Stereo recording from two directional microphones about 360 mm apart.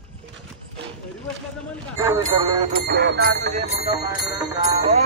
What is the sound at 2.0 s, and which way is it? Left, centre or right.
Speech, centre.